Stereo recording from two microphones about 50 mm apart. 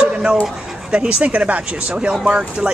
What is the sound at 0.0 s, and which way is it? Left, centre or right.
Dog, centre.